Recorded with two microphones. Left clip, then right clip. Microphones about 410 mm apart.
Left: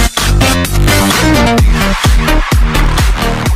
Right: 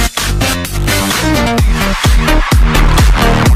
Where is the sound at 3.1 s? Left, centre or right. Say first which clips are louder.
Right 4 dB; right.